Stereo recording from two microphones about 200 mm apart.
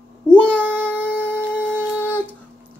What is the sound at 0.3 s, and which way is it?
Child singing, 5° left (ahead or behind).